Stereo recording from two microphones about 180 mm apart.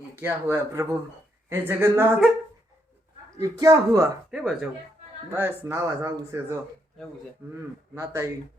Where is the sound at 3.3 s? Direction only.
20° right (ahead or behind).